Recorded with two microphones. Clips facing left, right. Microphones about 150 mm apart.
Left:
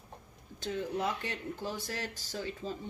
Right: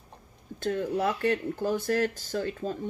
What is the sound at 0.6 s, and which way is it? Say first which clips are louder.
Speech: right 7 dB; 55° right (ahead or behind).